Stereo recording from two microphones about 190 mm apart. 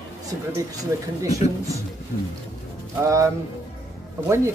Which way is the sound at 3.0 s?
15° right (ahead or behind).